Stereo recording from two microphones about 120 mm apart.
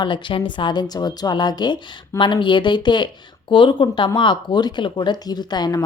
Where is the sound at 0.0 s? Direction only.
40° left (ahead or behind).